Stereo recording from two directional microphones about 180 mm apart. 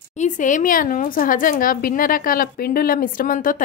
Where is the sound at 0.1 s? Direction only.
40° left (ahead or behind).